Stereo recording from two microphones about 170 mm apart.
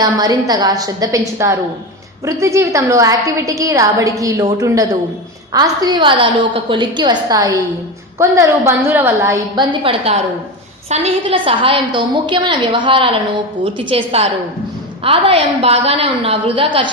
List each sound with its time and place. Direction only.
0.0 s a woman's voice: 20° right (ahead or behind)